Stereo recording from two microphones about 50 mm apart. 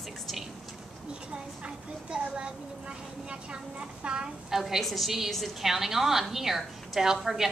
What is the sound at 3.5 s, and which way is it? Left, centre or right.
Speech, right.